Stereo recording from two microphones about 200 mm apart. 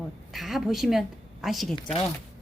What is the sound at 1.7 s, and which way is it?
Speech, 25° left (ahead or behind).